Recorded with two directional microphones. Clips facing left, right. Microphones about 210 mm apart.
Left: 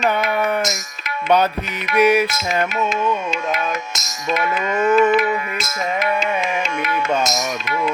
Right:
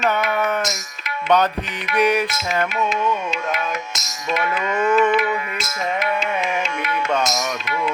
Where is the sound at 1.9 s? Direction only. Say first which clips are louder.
Left 3 dB; 10° left (ahead or behind).